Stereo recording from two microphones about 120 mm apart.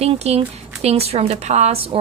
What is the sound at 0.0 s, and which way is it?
A woman's voice, 60° right (ahead or behind).